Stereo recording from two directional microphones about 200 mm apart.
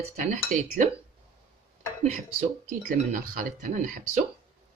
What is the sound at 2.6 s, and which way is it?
Speech, 45° right (ahead or behind).